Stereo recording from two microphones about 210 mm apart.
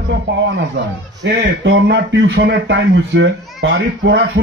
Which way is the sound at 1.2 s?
60° right (ahead or behind).